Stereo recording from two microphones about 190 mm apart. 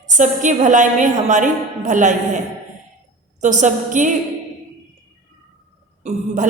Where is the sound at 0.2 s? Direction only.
40° right (ahead or behind).